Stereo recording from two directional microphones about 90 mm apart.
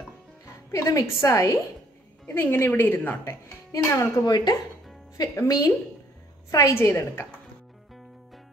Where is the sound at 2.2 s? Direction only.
25° left (ahead or behind).